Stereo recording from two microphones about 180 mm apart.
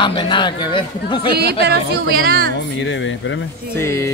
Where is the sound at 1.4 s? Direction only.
65° right (ahead or behind).